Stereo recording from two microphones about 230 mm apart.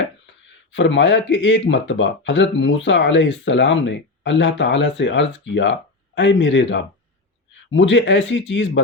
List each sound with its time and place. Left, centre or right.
0.7 s speech: left